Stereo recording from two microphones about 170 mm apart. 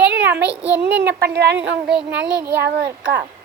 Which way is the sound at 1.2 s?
75° right (ahead or behind).